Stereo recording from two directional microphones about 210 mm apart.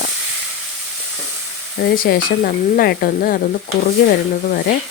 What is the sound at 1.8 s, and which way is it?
Speech, 45° left (ahead or behind).